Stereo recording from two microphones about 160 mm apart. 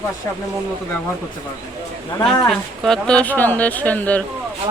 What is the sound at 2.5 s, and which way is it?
Speech, centre (ahead or behind).